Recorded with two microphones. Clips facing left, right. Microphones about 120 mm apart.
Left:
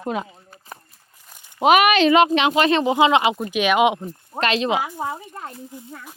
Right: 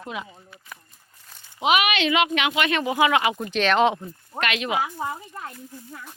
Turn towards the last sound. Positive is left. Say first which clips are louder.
# left 4 dB
turn(degrees=15)  # may be behind; listen again after turning